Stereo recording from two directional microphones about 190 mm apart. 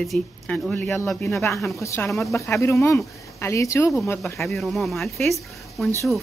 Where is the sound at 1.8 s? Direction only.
15° left (ahead or behind).